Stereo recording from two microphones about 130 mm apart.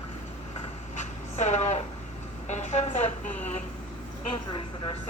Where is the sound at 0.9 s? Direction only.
65° left (ahead or behind).